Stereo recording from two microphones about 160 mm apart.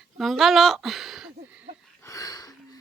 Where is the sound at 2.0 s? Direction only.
20° left (ahead or behind).